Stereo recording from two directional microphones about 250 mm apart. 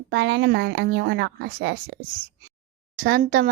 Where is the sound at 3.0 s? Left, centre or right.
Right.